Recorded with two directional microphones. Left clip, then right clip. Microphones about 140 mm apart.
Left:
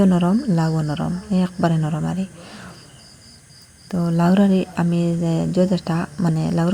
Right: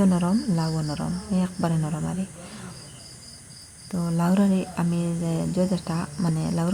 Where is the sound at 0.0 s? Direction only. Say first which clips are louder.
Left 5 dB; 30° left (ahead or behind).